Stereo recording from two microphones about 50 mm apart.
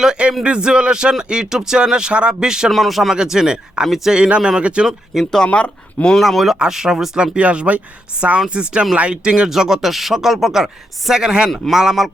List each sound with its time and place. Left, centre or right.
0.0 s speech: centre
2.6 s speech: centre
3.2 s speech: centre
4.1 s speech: centre
5.2 s speech: centre
5.5 s speech: left
6.1 s speech: centre
7.2 s speech: right; by 12.1 s centre